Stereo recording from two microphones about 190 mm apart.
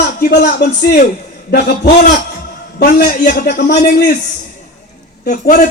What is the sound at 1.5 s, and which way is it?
Speech, 60° left (ahead or behind).